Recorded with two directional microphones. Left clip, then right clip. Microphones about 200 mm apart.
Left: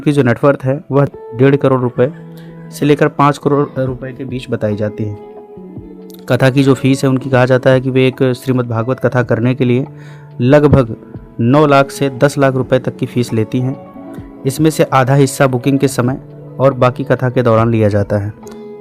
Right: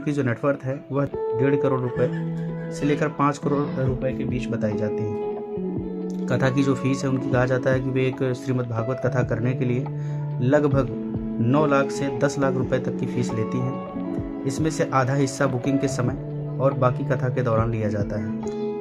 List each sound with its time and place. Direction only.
0.0 s speech: 45° left (ahead or behind)
6.2 s speech: 40° left (ahead or behind)